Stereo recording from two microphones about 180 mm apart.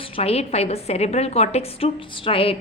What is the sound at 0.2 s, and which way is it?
A woman's voice, 35° left (ahead or behind).